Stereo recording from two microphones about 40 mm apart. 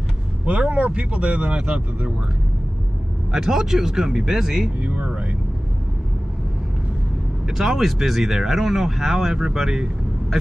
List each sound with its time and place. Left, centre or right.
0.5 s speech: right
3.3 s speech: centre
4.8 s speech: right
7.4 s speech: centre